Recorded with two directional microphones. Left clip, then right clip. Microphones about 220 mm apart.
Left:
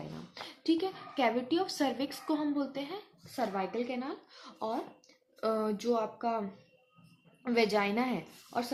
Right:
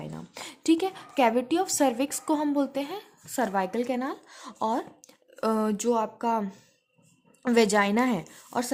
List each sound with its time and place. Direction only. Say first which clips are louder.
0.3 s a woman's voice: right 6 dB; 50° right (ahead or behind)
7.4 s a woman's voice: right 7 dB; 50° right (ahead or behind)